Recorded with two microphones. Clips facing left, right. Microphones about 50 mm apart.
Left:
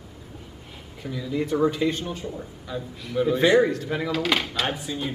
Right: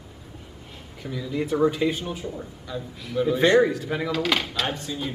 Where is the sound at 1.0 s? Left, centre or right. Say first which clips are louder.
Left 1 dB; centre.